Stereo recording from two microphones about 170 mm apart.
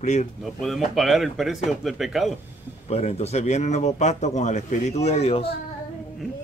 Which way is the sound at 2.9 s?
40° left (ahead or behind).